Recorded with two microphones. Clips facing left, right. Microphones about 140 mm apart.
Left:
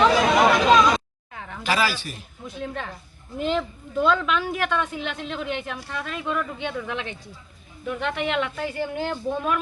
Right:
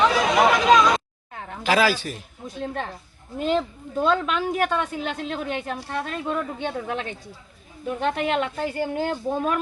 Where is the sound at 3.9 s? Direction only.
40° right (ahead or behind).